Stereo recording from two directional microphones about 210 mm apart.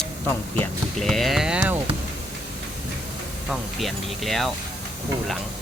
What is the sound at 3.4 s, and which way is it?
Speech, centre (ahead or behind).